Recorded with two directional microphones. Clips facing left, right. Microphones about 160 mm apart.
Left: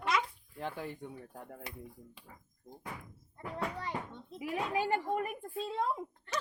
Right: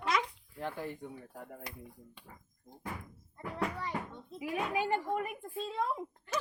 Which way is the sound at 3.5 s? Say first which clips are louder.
Right 1 dB; 20° left (ahead or behind).